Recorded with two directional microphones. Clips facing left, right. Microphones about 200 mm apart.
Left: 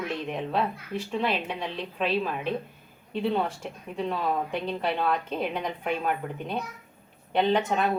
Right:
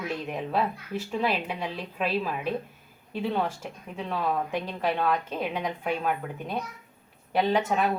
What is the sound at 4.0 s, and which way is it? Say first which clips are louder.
A woman's voice: left 1 dB; centre (ahead or behind).